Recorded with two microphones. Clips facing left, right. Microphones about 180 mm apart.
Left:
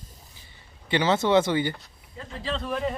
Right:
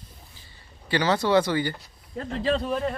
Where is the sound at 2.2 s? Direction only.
60° right (ahead or behind).